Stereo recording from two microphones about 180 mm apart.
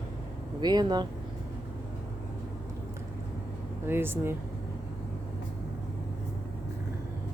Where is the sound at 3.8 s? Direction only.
10° right (ahead or behind).